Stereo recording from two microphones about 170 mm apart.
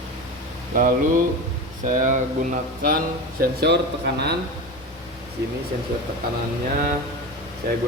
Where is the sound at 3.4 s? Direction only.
80° right.